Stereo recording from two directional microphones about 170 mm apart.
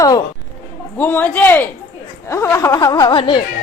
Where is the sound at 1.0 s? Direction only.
10° left (ahead or behind); by 3.4 s 30° left (ahead or behind).